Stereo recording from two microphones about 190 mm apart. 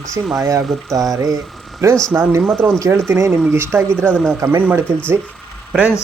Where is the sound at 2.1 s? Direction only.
10° right (ahead or behind).